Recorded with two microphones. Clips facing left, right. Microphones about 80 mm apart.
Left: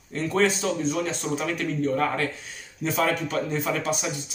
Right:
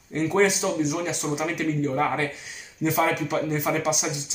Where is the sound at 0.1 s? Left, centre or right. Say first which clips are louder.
Right 2 dB; centre.